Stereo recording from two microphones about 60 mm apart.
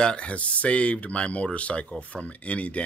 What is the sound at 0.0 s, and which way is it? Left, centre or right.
Speech, centre.